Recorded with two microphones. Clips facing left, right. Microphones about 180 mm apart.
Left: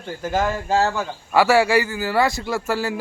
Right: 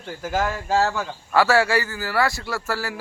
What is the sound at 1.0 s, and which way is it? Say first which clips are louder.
Speech: left 2 dB; 15° left (ahead or behind).